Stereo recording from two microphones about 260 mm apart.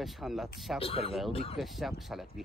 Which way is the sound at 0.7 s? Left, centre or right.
Left.